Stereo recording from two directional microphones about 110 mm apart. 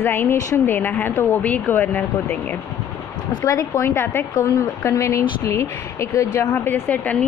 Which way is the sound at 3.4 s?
30° left (ahead or behind).